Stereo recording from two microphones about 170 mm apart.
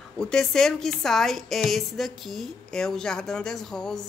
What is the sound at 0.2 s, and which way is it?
Speech, 5° left (ahead or behind).